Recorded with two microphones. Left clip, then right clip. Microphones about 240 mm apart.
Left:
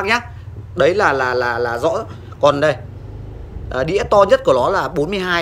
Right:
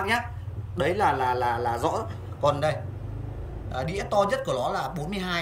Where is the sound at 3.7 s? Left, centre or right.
Centre.